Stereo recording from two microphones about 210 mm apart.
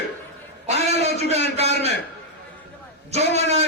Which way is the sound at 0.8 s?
30° right (ahead or behind).